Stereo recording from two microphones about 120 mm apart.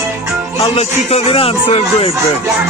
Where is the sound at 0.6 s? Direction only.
55° left (ahead or behind).